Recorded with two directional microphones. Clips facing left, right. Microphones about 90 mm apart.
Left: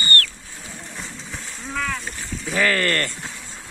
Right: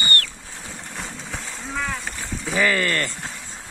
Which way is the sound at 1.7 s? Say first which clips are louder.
Left 1 dB; 15° right (ahead or behind).